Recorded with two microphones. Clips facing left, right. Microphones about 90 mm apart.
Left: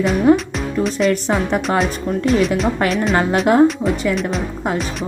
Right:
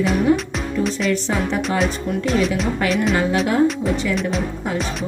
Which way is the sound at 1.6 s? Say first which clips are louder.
Left 2 dB; centre (ahead or behind).